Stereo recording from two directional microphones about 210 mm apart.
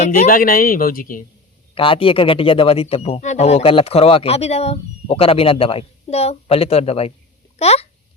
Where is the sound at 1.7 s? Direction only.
25° left (ahead or behind).